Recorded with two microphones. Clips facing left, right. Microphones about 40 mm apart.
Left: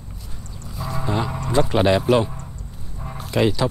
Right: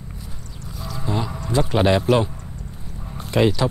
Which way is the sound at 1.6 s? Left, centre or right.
Centre.